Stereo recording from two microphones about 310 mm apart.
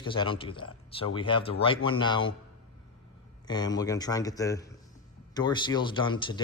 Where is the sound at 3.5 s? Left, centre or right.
Centre.